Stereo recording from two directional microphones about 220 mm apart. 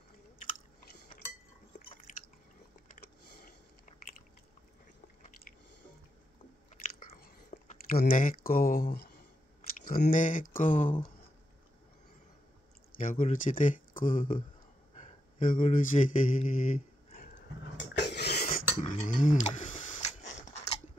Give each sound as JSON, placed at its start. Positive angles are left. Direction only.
{"t": 7.0, "sound": "whispering", "side_deg": 40}
{"t": 9.8, "sound": "speech", "side_deg": 40}
{"t": 13.0, "sound": "speech", "side_deg": 35}
{"t": 15.0, "sound": "mantra", "side_deg": 35}
{"t": 17.7, "sound": "a sound", "side_deg": 50}